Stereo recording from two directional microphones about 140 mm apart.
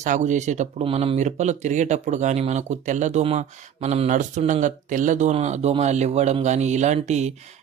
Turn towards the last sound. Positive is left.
turn(degrees=-55)  # may be behind; listen again after turning